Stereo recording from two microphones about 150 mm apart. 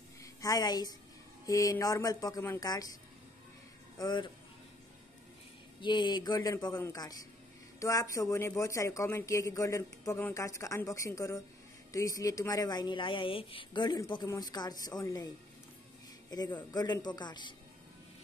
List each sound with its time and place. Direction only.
0.2 s a woman's voice: 25° left (ahead or behind)
4.0 s speech: 30° left (ahead or behind)
5.8 s speech: 30° left (ahead or behind)
16.3 s speech: 25° left (ahead or behind)